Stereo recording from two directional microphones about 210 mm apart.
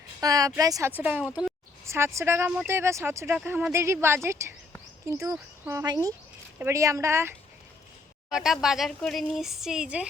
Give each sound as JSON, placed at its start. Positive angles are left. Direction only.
{"t": 0.2, "sound": "speech", "side_deg": -15}
{"t": 8.3, "sound": "speech", "side_deg": 0}